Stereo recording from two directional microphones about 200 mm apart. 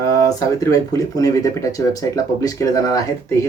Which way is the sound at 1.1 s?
15° left (ahead or behind).